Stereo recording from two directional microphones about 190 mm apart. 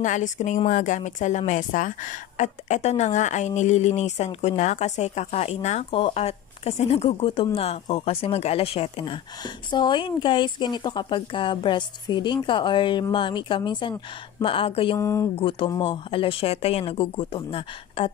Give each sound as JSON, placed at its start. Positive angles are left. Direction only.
{"t": 0.0, "sound": "a woman's voice", "side_deg": 40}
{"t": 15.0, "sound": "speech", "side_deg": 15}
{"t": 15.4, "sound": "speech", "side_deg": 25}